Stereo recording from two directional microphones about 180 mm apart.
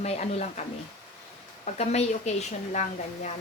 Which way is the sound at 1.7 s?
35° left (ahead or behind).